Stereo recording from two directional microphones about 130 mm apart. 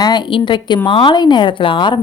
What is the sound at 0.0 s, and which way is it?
A woman's voice, 35° left (ahead or behind).